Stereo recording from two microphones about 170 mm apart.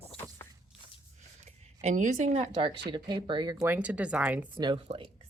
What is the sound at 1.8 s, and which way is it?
A woman's voice, 45° right (ahead or behind).